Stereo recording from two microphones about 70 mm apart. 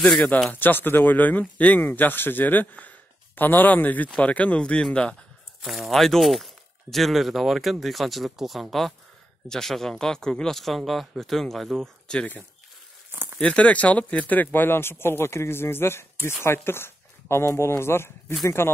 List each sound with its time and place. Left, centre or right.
0.0 s speech: centre
0.5 s speech: left
5.6 s speech: centre
13.4 s speech: centre; by 18.7 s left